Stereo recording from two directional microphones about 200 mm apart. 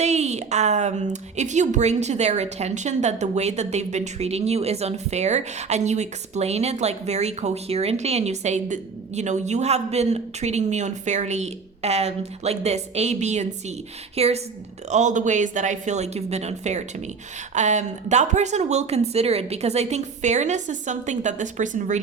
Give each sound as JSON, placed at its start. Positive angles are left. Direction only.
{"t": 0.0, "sound": "speech", "side_deg": -35}